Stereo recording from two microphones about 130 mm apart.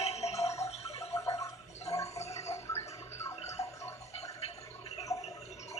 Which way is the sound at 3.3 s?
55° left (ahead or behind).